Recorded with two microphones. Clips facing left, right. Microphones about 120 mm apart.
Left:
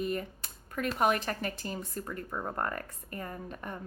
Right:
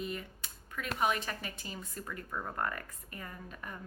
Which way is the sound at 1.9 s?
30° left (ahead or behind).